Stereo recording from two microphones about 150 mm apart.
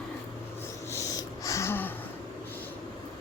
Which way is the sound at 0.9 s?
20° left (ahead or behind).